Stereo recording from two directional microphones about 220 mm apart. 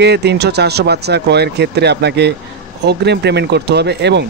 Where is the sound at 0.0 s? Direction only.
50° right (ahead or behind).